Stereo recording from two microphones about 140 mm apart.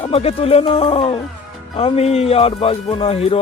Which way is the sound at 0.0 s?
45° left (ahead or behind).